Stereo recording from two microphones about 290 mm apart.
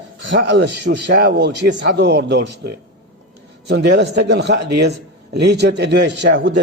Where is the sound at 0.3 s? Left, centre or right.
Right.